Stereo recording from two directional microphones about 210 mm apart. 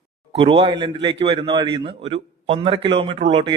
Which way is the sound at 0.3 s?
30° right (ahead or behind).